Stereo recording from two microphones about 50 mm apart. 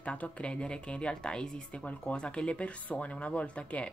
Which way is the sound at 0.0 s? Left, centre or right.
Left.